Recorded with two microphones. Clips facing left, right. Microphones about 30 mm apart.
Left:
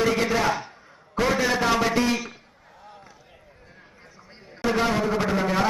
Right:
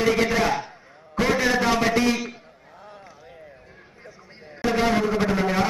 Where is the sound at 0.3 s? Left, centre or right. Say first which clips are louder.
Right 1 dB; centre.